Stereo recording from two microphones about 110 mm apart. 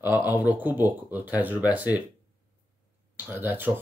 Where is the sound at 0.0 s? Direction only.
15° right (ahead or behind).